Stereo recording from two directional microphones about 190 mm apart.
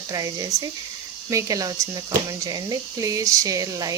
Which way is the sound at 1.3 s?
15° right (ahead or behind).